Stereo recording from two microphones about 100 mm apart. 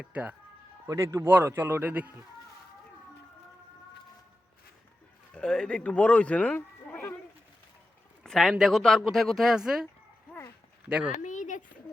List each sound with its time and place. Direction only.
0.0 s speech: 15° right (ahead or behind)
0.9 s a man's voice: 30° right (ahead or behind)
5.3 s speech: 10° left (ahead or behind)
8.2 s speech: 5° left (ahead or behind)